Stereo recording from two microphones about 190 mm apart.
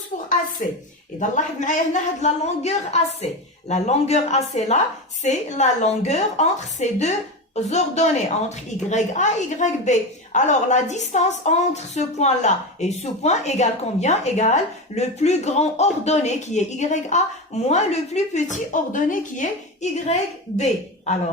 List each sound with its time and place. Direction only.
1.2 s a woman's voice: 40° left (ahead or behind)